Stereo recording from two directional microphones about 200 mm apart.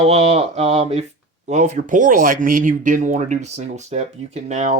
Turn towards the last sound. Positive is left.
turn(degrees=-35)  # may be behind; listen again after turning